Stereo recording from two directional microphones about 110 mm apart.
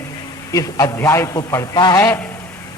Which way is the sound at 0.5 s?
35° left (ahead or behind).